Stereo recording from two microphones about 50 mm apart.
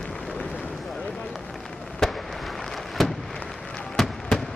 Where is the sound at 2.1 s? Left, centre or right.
Centre.